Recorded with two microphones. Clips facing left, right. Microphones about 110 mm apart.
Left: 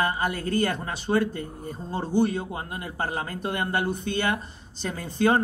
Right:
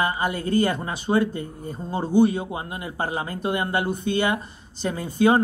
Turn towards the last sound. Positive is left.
turn(degrees=-15)  # may be behind; listen again after turning